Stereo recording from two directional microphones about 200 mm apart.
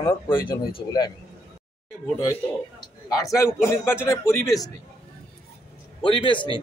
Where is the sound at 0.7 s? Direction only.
20° left (ahead or behind).